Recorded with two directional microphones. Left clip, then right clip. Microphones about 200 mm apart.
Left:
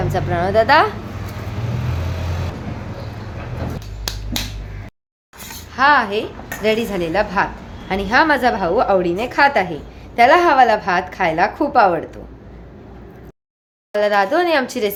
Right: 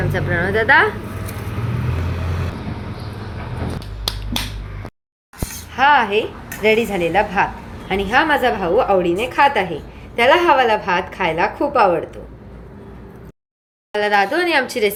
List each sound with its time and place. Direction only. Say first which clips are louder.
0.1 s a woman's voice: left 2 dB; 20° left (ahead or behind)
5.7 s a woman's voice: even; centre (ahead or behind); by 12.2 s 20° left (ahead or behind)
13.9 s a woman's voice: left 1 dB; 20° left (ahead or behind)